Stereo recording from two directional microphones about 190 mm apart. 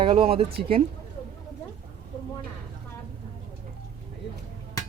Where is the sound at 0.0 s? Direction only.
30° right (ahead or behind).